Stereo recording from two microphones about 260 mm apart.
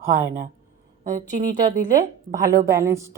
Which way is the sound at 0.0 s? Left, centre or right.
Centre.